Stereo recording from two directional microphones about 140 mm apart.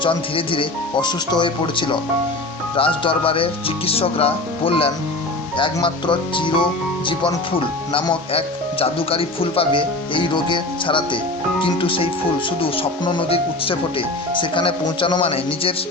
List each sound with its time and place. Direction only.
0.0 s speech: 35° left (ahead or behind)
7.9 s speech: 40° left (ahead or behind)